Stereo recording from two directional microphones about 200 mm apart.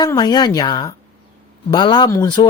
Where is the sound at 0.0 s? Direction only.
20° left (ahead or behind).